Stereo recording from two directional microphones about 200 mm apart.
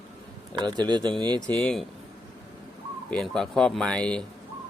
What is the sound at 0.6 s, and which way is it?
Speech, 20° right (ahead or behind).